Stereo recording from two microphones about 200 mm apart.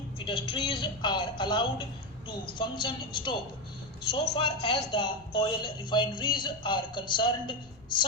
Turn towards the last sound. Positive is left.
turn(degrees=25)  # may be behind; listen again after turning